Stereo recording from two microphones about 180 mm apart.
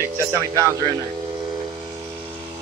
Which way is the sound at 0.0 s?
15° right (ahead or behind).